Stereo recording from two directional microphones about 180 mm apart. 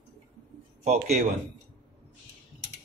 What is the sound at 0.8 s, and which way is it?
Speech, 45° right (ahead or behind).